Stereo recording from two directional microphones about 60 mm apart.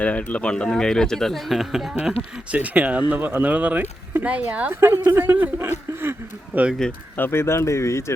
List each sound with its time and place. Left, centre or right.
0.0 s speech: left
0.5 s speech: centre
2.5 s speech: right
4.7 s speech: right
6.8 s speech: centre
7.2 s speech: left